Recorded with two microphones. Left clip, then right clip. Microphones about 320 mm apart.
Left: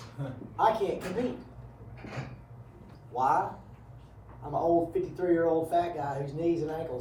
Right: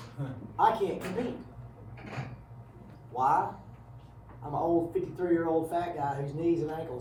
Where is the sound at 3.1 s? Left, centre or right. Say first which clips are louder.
Even; centre.